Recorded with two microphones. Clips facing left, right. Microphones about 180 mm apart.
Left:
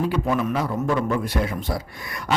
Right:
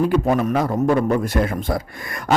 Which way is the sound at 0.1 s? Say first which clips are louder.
Right 5 dB; 45° right (ahead or behind).